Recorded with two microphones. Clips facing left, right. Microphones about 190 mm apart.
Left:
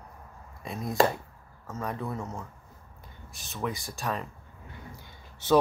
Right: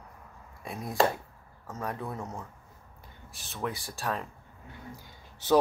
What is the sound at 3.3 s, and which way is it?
Speech, 15° left (ahead or behind).